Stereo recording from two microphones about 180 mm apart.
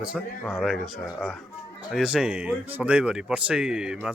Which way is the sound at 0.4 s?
10° left (ahead or behind).